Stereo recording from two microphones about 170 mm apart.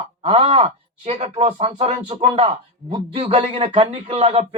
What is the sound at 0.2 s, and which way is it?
Speech, 35° right (ahead or behind).